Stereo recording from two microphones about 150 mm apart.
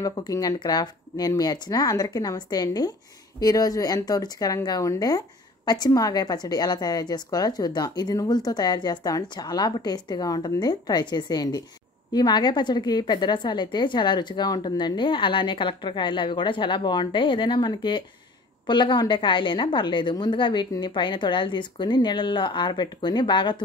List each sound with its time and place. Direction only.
0.0 s a woman's voice: 25° left (ahead or behind)